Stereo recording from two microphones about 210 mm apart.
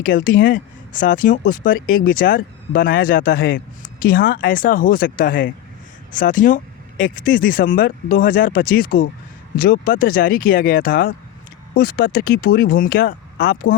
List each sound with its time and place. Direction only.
0.0 s speech: 40° left (ahead or behind)